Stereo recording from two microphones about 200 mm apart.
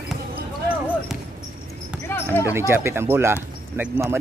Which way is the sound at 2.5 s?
15° right (ahead or behind).